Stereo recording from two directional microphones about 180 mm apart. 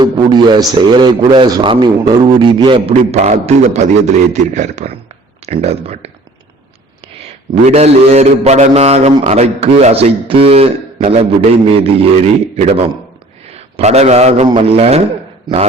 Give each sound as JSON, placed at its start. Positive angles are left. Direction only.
{"t": 0.0, "sound": "a man's voice", "side_deg": -25}
{"t": 7.7, "sound": "a man's voice", "side_deg": -35}